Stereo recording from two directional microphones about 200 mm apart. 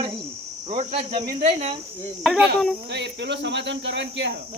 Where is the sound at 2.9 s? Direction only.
60° right (ahead or behind).